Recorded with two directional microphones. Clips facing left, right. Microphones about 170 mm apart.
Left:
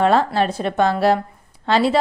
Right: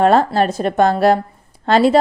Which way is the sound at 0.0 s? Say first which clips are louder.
Right 3 dB; 45° right (ahead or behind).